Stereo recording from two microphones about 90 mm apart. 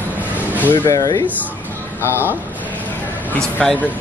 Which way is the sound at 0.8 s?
40° left (ahead or behind).